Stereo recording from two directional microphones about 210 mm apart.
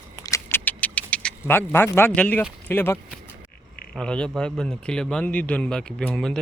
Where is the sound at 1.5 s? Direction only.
10° left (ahead or behind).